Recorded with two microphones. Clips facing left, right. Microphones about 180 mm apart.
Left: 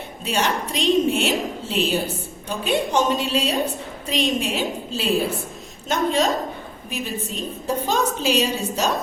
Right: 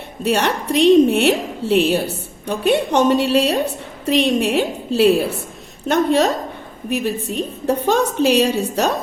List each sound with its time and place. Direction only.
0.2 s a woman's voice: 65° right (ahead or behind)